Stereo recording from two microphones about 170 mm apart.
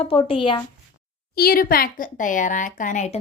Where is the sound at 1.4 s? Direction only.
60° left (ahead or behind).